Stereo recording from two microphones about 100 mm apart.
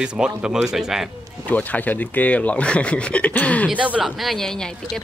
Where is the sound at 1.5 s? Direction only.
15° left (ahead or behind).